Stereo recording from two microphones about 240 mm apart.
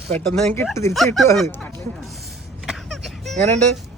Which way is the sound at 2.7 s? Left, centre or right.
Centre.